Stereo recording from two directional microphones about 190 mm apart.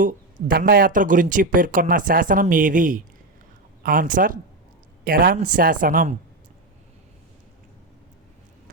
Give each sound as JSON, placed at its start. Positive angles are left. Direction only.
{"t": 0.0, "sound": "speech", "side_deg": -50}